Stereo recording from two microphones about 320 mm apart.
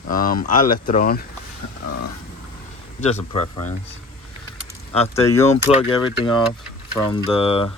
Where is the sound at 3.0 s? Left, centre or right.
Centre.